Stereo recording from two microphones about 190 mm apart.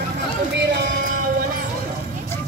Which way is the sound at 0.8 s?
45° right (ahead or behind).